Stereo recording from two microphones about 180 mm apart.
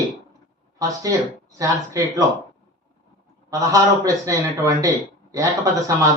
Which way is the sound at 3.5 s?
20° right (ahead or behind).